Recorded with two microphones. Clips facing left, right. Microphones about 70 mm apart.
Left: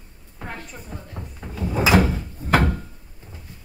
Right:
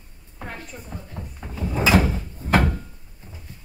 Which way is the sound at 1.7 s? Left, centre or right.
Centre.